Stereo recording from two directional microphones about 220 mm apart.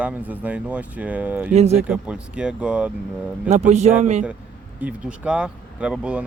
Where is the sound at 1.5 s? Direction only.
30° right (ahead or behind).